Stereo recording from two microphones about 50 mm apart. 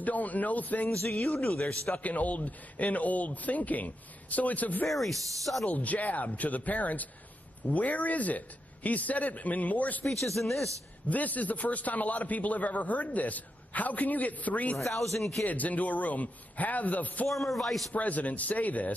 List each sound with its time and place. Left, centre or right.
0.0 s a man's voice: left
1.2 s a man's voice: left
1.6 s a man's voice: left
4.8 s speech: centre
5.7 s a man's voice: left
10.2 s speech: centre
11.1 s a man's voice: left
14.8 s speech: centre
15.4 s a man's voice: left
17.3 s speech: centre
17.9 s a man's voice: left